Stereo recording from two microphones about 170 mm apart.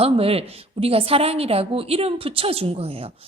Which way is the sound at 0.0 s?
35° right (ahead or behind).